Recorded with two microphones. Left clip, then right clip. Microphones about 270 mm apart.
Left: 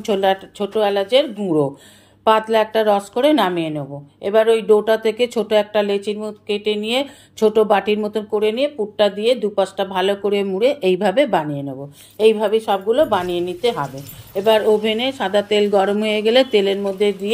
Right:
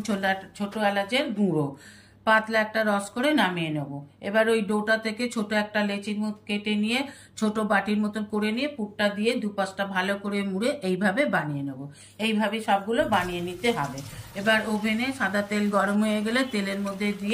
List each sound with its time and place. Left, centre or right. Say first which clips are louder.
0.0 s a woman's voice: left 10 dB; centre
14.3 s a woman's voice: left 10 dB; centre